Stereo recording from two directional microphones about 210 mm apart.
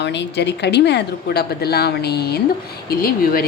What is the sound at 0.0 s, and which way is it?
A woman's voice, 55° left (ahead or behind).